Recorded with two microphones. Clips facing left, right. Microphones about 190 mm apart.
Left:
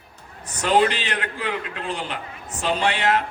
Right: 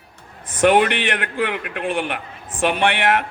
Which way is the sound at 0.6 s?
65° right (ahead or behind).